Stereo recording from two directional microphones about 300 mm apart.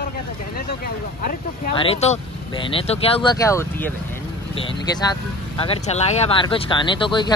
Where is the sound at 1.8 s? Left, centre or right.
Centre.